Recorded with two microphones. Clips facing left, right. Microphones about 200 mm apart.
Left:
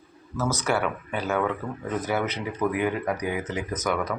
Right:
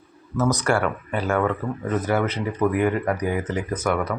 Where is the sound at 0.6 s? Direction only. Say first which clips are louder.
Right 4 dB; 5° left (ahead or behind).